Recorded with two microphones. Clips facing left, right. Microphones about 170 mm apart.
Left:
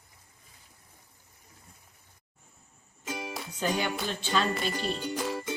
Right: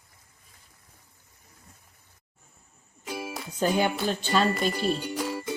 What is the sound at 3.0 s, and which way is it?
Music, 5° right (ahead or behind).